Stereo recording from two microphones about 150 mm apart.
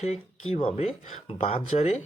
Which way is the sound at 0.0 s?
45° left (ahead or behind).